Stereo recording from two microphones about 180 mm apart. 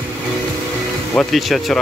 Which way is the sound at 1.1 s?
5° left (ahead or behind).